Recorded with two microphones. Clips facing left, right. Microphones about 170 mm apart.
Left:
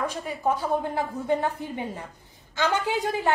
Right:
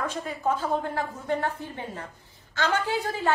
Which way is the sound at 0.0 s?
15° left (ahead or behind).